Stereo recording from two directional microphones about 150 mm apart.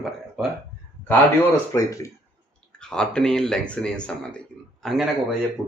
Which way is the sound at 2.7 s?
5° left (ahead or behind).